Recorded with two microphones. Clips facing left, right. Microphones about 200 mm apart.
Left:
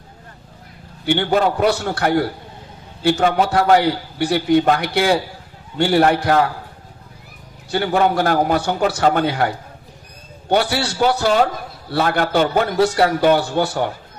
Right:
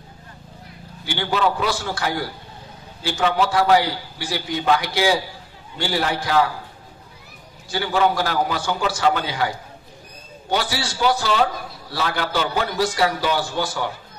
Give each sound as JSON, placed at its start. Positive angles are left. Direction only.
{"t": 1.0, "sound": "a man's voice", "side_deg": 55}
{"t": 7.7, "sound": "a man's voice", "side_deg": 55}